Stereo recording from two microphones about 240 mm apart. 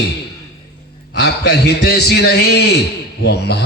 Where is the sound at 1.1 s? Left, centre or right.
Left.